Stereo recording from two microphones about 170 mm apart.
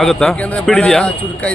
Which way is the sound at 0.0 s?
Centre (ahead or behind).